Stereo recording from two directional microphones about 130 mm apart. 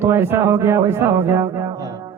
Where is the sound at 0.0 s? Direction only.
15° right (ahead or behind).